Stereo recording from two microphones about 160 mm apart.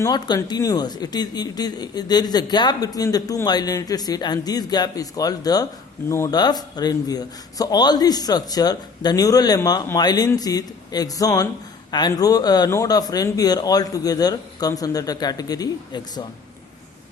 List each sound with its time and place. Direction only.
0.0 s speech: 20° left (ahead or behind)